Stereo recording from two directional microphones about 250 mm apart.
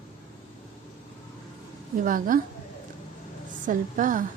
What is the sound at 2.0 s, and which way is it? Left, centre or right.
Speech, right.